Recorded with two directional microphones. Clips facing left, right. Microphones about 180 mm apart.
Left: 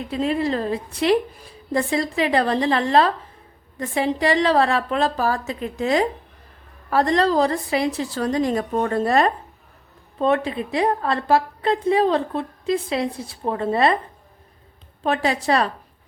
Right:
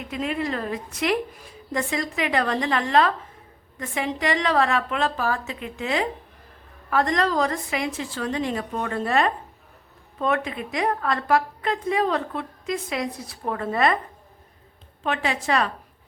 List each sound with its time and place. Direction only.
0.0 s a woman's voice: 30° left (ahead or behind)
15.0 s a woman's voice: 35° left (ahead or behind)